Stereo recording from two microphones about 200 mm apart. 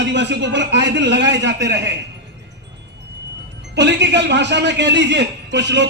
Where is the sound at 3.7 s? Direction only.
60° right (ahead or behind).